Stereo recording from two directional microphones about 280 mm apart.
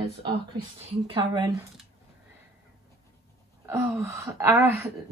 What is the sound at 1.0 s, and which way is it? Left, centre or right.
Speech, centre.